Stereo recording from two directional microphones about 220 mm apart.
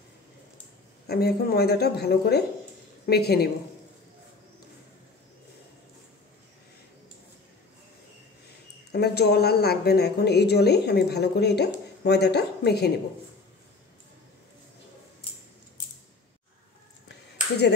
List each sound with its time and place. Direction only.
1.0 s speech: 45° left (ahead or behind)
8.9 s speech: 50° left (ahead or behind)